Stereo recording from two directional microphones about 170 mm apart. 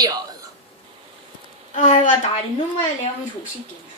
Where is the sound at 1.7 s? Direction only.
45° left (ahead or behind).